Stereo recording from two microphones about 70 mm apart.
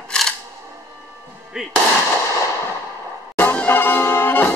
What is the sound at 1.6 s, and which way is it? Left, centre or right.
Speech, centre.